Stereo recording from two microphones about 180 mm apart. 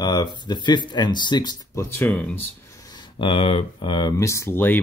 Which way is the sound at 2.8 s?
20° left (ahead or behind).